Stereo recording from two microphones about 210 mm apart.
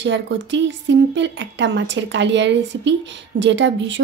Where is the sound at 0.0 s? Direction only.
60° right (ahead or behind).